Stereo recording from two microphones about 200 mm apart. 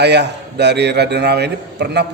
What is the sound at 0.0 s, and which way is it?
Speech, 55° right (ahead or behind).